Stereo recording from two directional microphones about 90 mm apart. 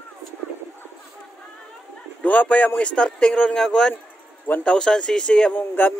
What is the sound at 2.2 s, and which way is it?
Speech, 15° left (ahead or behind).